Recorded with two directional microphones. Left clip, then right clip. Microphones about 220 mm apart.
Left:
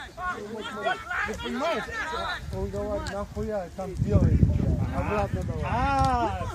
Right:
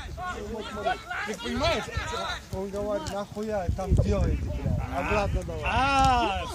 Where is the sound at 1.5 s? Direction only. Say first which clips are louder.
Right 4 dB; 30° right (ahead or behind).